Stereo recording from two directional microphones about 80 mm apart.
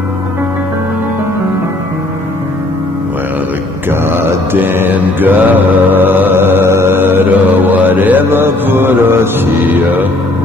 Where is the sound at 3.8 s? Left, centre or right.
Right.